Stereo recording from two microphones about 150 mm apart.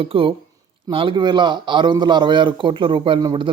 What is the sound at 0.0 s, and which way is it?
A man's voice, 35° right (ahead or behind).